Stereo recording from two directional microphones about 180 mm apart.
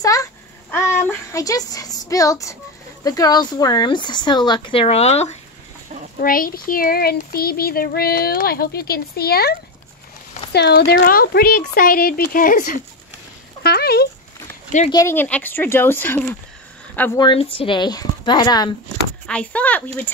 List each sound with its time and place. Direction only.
0.0 s a sound: 20° left (ahead or behind)
3.0 s speech: 20° left (ahead or behind); by 5.4 s 35° left (ahead or behind)
6.1 s speech: 50° left (ahead or behind)
13.6 s a sound: 60° left (ahead or behind)
14.9 s speech: 15° left (ahead or behind)
17.2 s speech: 30° left (ahead or behind)
19.2 s speech: 5° left (ahead or behind)